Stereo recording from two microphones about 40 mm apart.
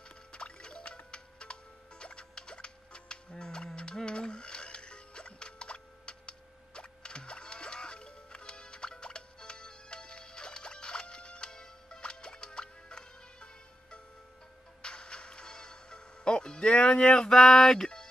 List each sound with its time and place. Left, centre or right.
0.3 s music: left